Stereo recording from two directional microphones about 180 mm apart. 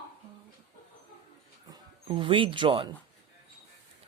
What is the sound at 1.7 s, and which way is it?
Speech, 30° right (ahead or behind).